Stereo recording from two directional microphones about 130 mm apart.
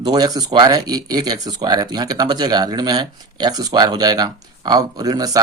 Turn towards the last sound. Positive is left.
turn(degrees=-30)  # may be behind; listen again after turning